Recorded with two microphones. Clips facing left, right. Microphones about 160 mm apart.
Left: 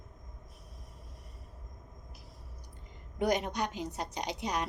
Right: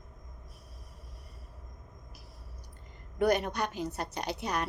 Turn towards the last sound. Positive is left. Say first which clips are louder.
# right 1 dB
turn(degrees=15)  # may be behind; listen again after turning